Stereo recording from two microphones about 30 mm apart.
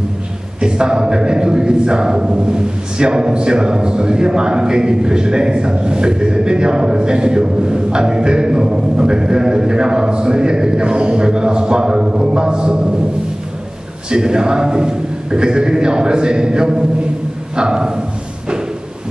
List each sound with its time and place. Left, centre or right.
0.6 s a man's voice: right
14.1 s a man's voice: right